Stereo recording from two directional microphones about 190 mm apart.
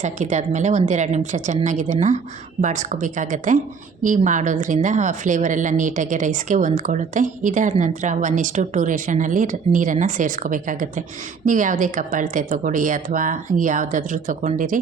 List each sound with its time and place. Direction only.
0.0 s a woman's voice: 40° right (ahead or behind)